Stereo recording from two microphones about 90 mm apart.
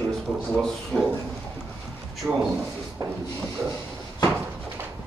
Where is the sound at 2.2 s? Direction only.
Centre (ahead or behind).